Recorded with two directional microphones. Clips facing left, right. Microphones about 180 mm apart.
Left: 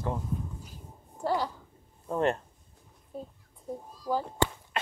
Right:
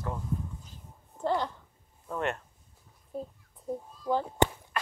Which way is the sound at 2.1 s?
30° left (ahead or behind).